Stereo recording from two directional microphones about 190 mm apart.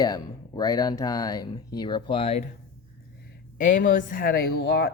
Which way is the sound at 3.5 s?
45° left (ahead or behind).